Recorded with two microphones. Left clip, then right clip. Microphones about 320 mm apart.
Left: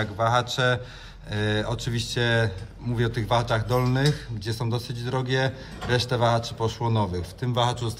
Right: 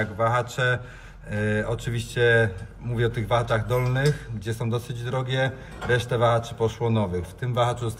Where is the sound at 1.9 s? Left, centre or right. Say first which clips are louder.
Right 6 dB; centre.